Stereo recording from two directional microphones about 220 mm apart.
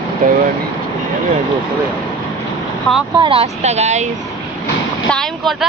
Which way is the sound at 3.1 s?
25° right (ahead or behind).